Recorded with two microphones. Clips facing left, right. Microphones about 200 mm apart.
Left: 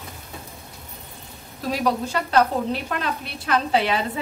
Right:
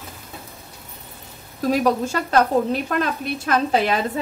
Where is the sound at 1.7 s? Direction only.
45° right (ahead or behind).